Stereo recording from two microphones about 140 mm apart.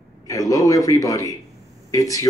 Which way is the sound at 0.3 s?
25° left (ahead or behind).